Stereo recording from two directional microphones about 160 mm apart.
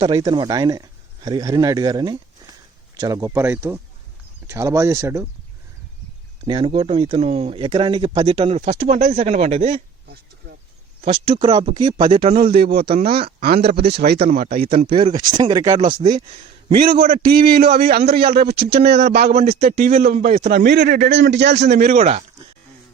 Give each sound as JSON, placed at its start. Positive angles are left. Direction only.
{"t": 0.2, "sound": "speech", "side_deg": -25}
{"t": 6.4, "sound": "speech", "side_deg": -30}
{"t": 11.0, "sound": "speech", "side_deg": -40}
{"t": 12.5, "sound": "a man's voice", "side_deg": -75}
{"t": 12.8, "sound": "speech", "side_deg": -35}
{"t": 13.4, "sound": "a man's voice", "side_deg": -80}
{"t": 14.8, "sound": "speech", "side_deg": -30}
{"t": 16.1, "sound": "speech", "side_deg": -40}
{"t": 17.0, "sound": "a man's voice", "side_deg": -70}
{"t": 18.9, "sound": "a man's voice", "side_deg": -90}
{"t": 19.3, "sound": "a man's voice", "side_deg": -45}
{"t": 21.8, "sound": "a man's voice", "side_deg": -45}